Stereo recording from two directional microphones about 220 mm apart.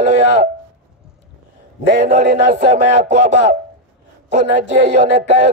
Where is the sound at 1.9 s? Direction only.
30° right (ahead or behind).